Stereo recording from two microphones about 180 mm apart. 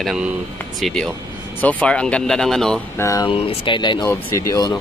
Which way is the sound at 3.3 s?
30° left (ahead or behind).